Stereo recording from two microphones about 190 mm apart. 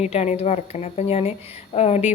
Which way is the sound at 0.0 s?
35° left (ahead or behind).